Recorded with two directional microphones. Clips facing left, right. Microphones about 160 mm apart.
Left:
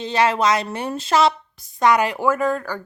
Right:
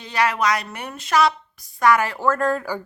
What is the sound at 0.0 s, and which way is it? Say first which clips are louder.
Speech: left 3 dB; 25° left (ahead or behind).